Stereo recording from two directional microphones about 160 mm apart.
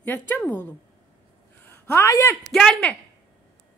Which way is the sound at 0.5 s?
10° left (ahead or behind).